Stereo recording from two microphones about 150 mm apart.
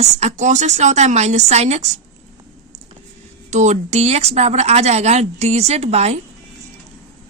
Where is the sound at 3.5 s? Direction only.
50° right (ahead or behind).